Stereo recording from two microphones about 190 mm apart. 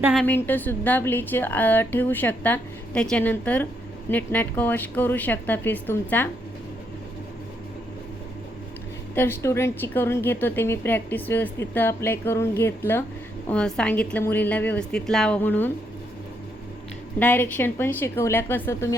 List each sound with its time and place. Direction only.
0.0 s a woman's voice: centre (ahead or behind)
9.1 s a woman's voice: 10° left (ahead or behind)
17.2 s a woman's voice: 10° left (ahead or behind)